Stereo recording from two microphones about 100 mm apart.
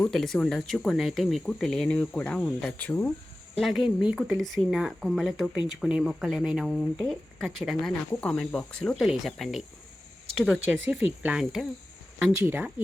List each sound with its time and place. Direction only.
0.1 s speech: 5° left (ahead or behind)
3.5 s speech: centre (ahead or behind)
4.4 s speech: centre (ahead or behind)
10.7 s speech: 15° right (ahead or behind)
12.5 s speech: 20° right (ahead or behind)